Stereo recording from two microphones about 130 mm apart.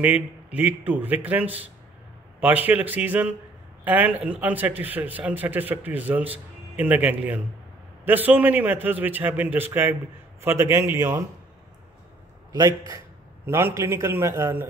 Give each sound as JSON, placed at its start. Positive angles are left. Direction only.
{"t": 0.0, "sound": "a man's voice", "side_deg": -10}
{"t": 13.5, "sound": "a man's voice", "side_deg": -20}